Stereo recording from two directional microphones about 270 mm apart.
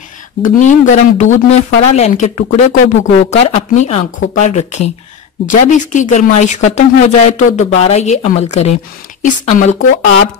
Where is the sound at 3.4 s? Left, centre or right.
Left.